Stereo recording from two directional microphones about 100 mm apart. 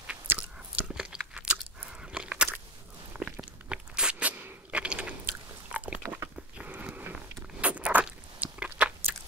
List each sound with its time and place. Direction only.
0.0 s biting: 15° right (ahead or behind)
2.1 s chewing: 10° right (ahead or behind)
3.2 s a sound: 5° right (ahead or behind)
5.8 s biting: 10° right (ahead or behind)
6.0 s biting: 30° right (ahead or behind)
6.6 s biting: 15° right (ahead or behind)